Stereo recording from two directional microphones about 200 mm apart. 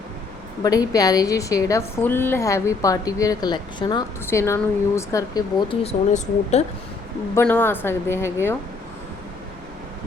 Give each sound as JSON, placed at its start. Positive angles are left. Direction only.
{"t": 0.6, "sound": "a woman's voice", "side_deg": 20}
{"t": 7.3, "sound": "a woman's voice", "side_deg": 10}